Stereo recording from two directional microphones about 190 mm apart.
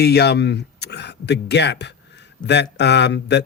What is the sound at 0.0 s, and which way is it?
Speech, 60° left (ahead or behind).